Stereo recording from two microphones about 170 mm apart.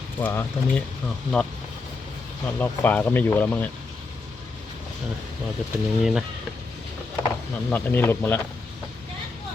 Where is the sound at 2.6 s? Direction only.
10° left (ahead or behind).